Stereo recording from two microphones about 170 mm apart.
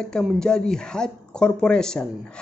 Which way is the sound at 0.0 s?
Centre (ahead or behind).